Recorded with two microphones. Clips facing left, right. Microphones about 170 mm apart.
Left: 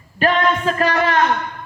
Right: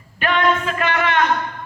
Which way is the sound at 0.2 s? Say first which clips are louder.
Left 2 dB; 35° left (ahead or behind).